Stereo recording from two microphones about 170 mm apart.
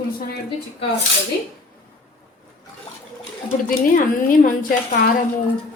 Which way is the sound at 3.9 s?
50° left (ahead or behind).